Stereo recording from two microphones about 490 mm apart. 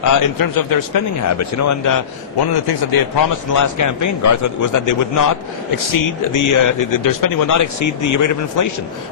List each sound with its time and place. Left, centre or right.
0.0 s speech: left
2.6 s speech: left
3.5 s speech: left